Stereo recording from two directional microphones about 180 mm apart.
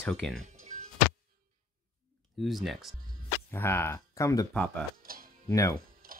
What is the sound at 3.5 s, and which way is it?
Speech, 10° left (ahead or behind).